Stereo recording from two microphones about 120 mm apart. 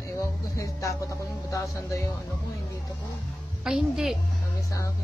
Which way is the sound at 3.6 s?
5° right (ahead or behind).